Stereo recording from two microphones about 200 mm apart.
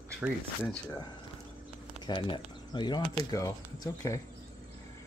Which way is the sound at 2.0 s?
25° left (ahead or behind).